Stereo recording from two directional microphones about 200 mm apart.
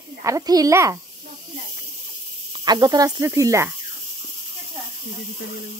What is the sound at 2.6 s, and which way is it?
Cricket, 20° right (ahead or behind).